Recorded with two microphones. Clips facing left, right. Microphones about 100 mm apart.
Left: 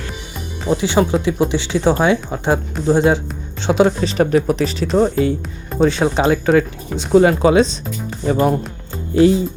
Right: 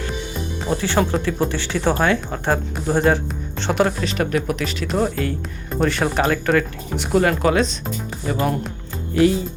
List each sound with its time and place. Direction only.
0.7 s speech: 15° left (ahead or behind)
4.0 s speech: 30° left (ahead or behind)
4.9 s speech: 20° left (ahead or behind)